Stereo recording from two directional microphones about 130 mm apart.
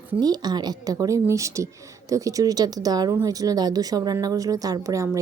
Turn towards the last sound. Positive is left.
turn(degrees=-25)  # may be behind; listen again after turning